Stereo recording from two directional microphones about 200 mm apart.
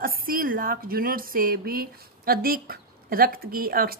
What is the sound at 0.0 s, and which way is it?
A woman's voice, 45° right (ahead or behind).